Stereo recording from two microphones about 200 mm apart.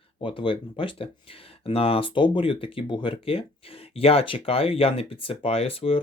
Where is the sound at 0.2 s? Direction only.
25° left (ahead or behind).